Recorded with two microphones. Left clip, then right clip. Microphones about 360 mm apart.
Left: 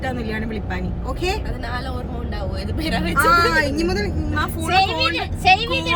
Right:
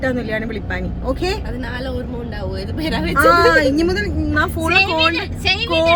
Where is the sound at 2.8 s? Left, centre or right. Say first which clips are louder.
Right 4 dB; centre.